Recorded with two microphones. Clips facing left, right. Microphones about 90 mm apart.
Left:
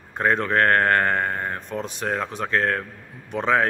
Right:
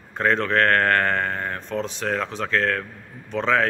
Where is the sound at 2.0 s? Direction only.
20° left (ahead or behind).